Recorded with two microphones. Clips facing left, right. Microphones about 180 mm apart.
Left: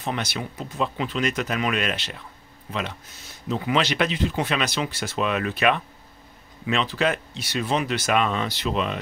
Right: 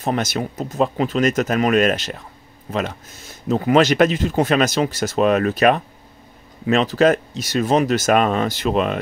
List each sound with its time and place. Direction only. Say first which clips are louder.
0.0 s speech: right 7 dB; 45° right (ahead or behind)